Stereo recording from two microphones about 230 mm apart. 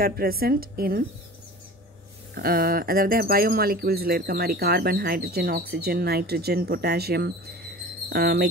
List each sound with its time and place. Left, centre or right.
0.0 s speech: right
2.3 s speech: right